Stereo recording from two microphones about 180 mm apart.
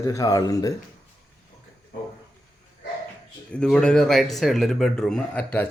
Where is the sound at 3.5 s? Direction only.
5° left (ahead or behind).